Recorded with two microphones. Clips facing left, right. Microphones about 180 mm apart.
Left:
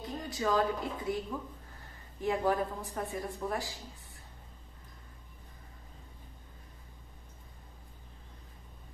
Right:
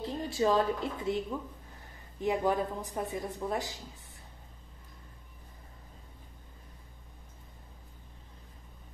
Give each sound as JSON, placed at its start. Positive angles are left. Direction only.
{"t": 0.0, "sound": "speech", "side_deg": -30}
{"t": 2.2, "sound": "speech", "side_deg": -20}